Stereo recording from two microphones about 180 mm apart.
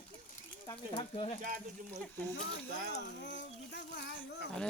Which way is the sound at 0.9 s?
30° left (ahead or behind).